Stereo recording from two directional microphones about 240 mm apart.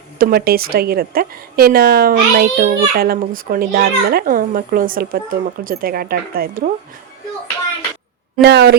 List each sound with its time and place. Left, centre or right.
0.2 s a woman's voice: right
8.4 s speech: right